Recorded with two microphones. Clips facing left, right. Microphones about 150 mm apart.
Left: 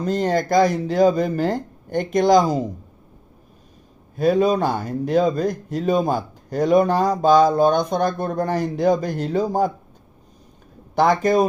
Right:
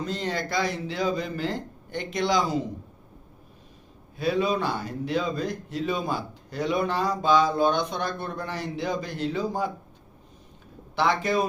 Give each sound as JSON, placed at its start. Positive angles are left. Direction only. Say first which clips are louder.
{"t": 0.0, "sound": "speech", "louder": "left 9 dB", "side_deg": 45}
{"t": 4.2, "sound": "speech", "louder": "left 7 dB", "side_deg": 45}
{"t": 10.9, "sound": "speech", "louder": "left 7 dB", "side_deg": 45}